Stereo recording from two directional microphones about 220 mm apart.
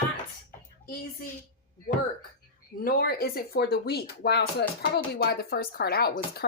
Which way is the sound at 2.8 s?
45° left (ahead or behind).